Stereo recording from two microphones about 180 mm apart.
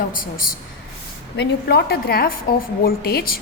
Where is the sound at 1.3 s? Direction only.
65° left (ahead or behind).